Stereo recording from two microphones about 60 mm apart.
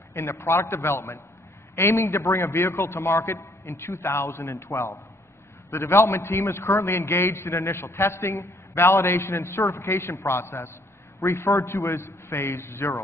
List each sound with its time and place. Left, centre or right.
0.1 s a man's voice: left